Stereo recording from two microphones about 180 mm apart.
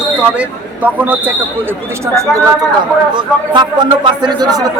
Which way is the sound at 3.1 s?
25° right (ahead or behind).